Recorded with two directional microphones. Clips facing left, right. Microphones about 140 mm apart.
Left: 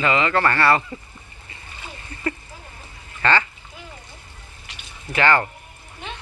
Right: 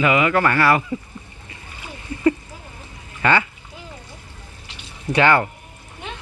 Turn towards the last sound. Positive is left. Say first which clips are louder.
# right 3 dB
turn(degrees=-15)  # may be behind; listen again after turning